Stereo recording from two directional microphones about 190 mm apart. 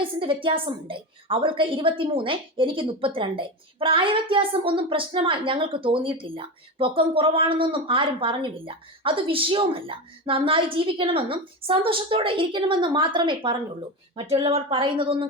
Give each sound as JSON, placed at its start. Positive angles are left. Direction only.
{"t": 0.0, "sound": "a woman's voice", "side_deg": -25}